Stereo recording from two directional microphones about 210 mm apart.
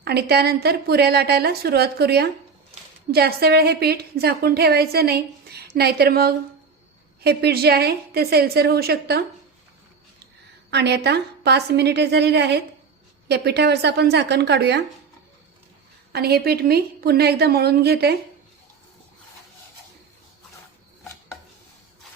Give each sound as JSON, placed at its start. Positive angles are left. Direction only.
{"t": 0.0, "sound": "a woman's voice", "side_deg": -50}
{"t": 10.7, "sound": "a woman's voice", "side_deg": -55}
{"t": 16.1, "sound": "a woman's voice", "side_deg": -50}